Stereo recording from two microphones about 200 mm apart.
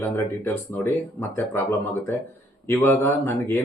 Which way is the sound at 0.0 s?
10° left (ahead or behind).